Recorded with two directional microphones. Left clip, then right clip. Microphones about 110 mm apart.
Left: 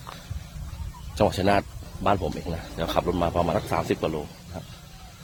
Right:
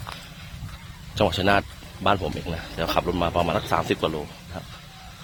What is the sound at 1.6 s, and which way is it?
Speech, 20° left (ahead or behind).